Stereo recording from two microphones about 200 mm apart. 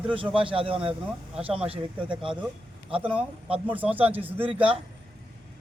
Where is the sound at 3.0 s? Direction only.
5° right (ahead or behind).